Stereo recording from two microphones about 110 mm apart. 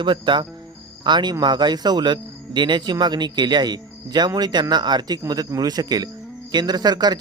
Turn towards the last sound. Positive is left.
turn(degrees=-40)  # may be behind; listen again after turning